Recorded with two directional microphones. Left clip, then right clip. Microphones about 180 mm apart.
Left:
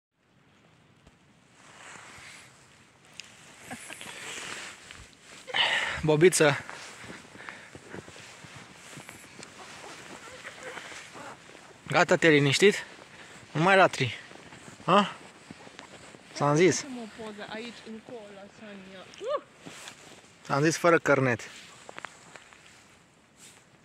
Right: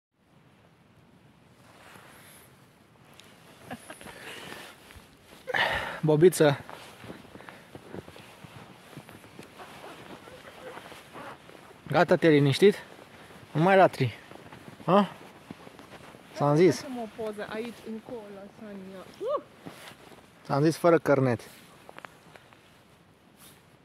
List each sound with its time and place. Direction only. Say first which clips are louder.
1.8 s a sound: left 5 dB; 40° left (ahead or behind)
5.5 s a sound: left 1 dB; 45° right (ahead or behind)
5.8 s speech: right 1 dB; 20° right (ahead or behind); by 6.6 s 5° right (ahead or behind)
11.9 s speech: even; 5° right (ahead or behind)
15.5 s a sound: right 2 dB; centre (ahead or behind)
16.3 s speech: right 1 dB; 5° right (ahead or behind)
17.4 s speech: right 3 dB; 60° right (ahead or behind)
20.4 s speech: even; 5° right (ahead or behind)
21.9 s walk: left 4 dB; 35° left (ahead or behind)